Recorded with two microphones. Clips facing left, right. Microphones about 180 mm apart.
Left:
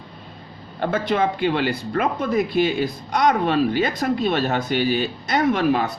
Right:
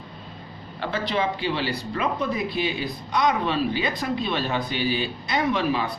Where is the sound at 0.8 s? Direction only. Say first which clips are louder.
Left 5 dB; 50° left (ahead or behind).